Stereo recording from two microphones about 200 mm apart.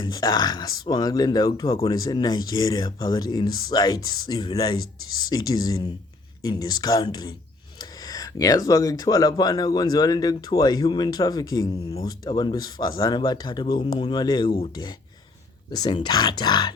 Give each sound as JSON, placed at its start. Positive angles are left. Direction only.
{"t": 0.0, "sound": "speech", "side_deg": 20}